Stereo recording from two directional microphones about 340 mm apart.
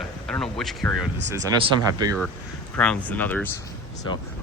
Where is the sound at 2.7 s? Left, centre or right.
Centre.